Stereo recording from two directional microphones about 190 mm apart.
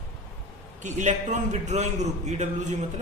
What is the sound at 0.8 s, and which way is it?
Speech, 40° right (ahead or behind).